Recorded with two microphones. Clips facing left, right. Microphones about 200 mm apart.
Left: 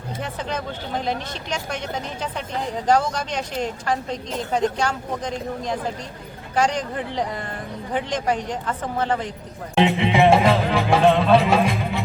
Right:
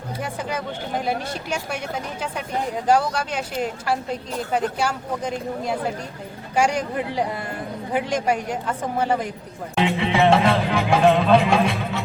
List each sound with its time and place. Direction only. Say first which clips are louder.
0.2 s speech: even; 10° right (ahead or behind)
9.7 s music: left 2 dB; 20° left (ahead or behind)
10.7 s music: even; centre (ahead or behind)